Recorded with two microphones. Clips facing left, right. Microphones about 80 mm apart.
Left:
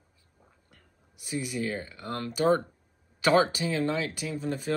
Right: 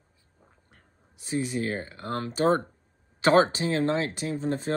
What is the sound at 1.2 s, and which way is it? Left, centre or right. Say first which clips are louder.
Speech: right 3 dB; right.